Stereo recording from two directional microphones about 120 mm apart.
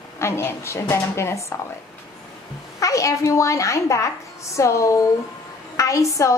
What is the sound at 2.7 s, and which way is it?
A woman's voice, 25° left (ahead or behind).